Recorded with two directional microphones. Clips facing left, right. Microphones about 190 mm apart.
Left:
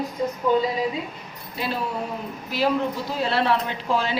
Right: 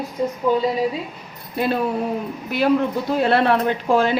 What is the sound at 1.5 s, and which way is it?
A woman's voice, 55° right (ahead or behind).